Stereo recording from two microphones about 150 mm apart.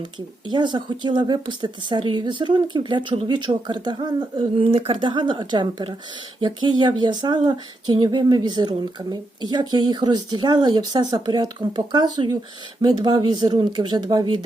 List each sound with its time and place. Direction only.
0.0 s speech: 30° right (ahead or behind)